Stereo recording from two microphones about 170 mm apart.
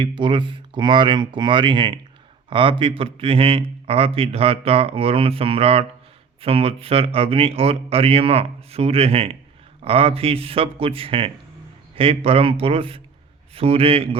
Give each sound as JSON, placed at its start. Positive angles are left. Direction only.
{"t": 0.0, "sound": "speech", "side_deg": -30}